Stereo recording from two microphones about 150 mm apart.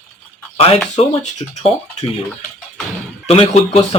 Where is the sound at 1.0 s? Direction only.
45° left (ahead or behind).